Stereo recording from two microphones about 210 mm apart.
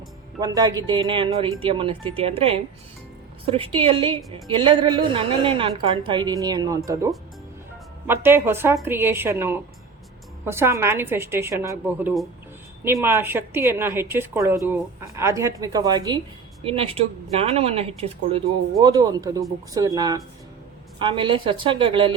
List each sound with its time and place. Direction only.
0.3 s a woman's voice: 20° right (ahead or behind)